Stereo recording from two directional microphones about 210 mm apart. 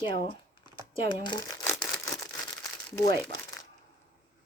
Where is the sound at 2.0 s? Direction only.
15° left (ahead or behind).